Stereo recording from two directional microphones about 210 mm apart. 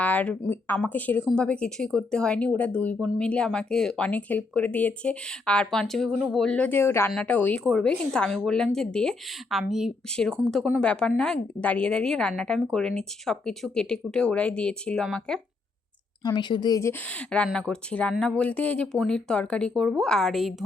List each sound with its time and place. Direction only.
0.0 s speech: 5° left (ahead or behind)
16.2 s a woman's voice: 20° left (ahead or behind)
17.1 s speech: 5° left (ahead or behind)